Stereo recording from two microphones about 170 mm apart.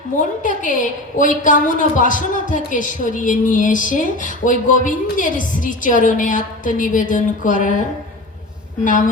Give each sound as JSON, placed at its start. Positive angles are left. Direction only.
{"t": 0.2, "sound": "a woman's voice", "side_deg": 50}
{"t": 8.8, "sound": "a woman's voice", "side_deg": 50}